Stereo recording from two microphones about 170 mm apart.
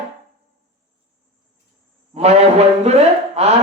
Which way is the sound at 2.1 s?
40° right (ahead or behind).